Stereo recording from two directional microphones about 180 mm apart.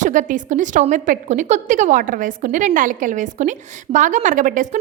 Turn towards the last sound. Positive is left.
turn(degrees=-45)  # may be behind; listen again after turning